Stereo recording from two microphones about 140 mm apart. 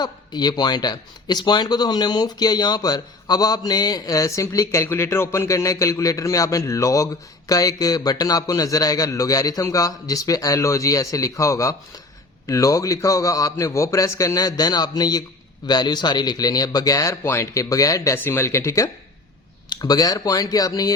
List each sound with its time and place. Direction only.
0.0 s speech: 30° left (ahead or behind)